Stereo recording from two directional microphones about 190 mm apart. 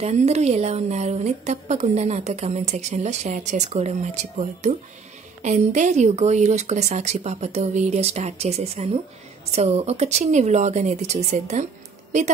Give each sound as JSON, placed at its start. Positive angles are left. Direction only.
{"t": 0.0, "sound": "a woman's voice", "side_deg": -35}